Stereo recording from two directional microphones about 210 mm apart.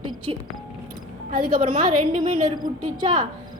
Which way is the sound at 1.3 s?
45° right (ahead or behind).